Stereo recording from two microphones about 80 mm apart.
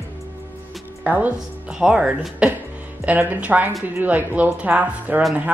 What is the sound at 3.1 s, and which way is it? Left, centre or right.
Speech, right.